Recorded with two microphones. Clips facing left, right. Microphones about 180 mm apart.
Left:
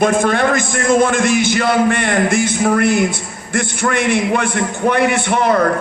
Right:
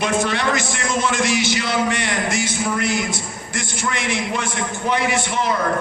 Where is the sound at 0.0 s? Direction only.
50° left (ahead or behind).